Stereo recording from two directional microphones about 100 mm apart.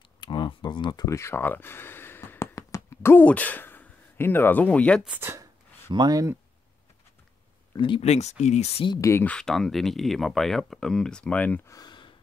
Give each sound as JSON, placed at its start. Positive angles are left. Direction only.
{"t": 0.2, "sound": "a sound", "side_deg": 50}
{"t": 1.0, "sound": "speech", "side_deg": 25}
{"t": 5.9, "sound": "speech", "side_deg": -45}
{"t": 7.7, "sound": "speech", "side_deg": 55}
{"t": 8.0, "sound": "speech", "side_deg": 90}
{"t": 9.2, "sound": "speech", "side_deg": 15}
{"t": 9.5, "sound": "speech", "side_deg": 0}
{"t": 11.6, "sound": "speech", "side_deg": 35}